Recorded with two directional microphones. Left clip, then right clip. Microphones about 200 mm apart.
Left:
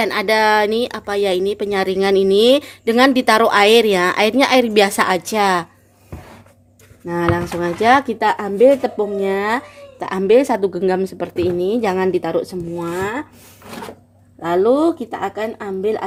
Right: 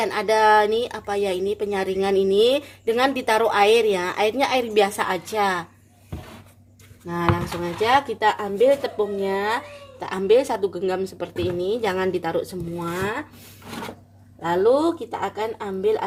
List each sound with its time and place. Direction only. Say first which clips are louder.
0.0 s speech: left 3 dB; 40° left (ahead or behind)
7.6 s speech: left 6 dB; 55° left (ahead or behind)
14.4 s speech: left 4 dB; 50° left (ahead or behind)